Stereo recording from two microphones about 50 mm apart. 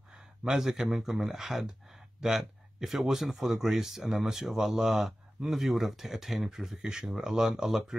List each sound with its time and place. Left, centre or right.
0.1 s speech: centre